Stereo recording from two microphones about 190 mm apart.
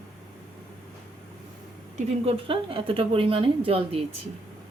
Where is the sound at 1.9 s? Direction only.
30° right (ahead or behind).